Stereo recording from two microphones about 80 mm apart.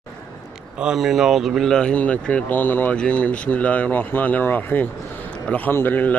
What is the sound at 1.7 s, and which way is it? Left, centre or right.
Speech, centre.